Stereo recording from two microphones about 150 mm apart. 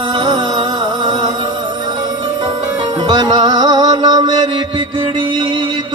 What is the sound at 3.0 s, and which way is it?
Music, 30° right (ahead or behind).